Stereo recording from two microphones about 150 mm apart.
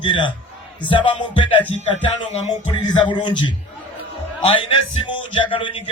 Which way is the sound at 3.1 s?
30° left (ahead or behind).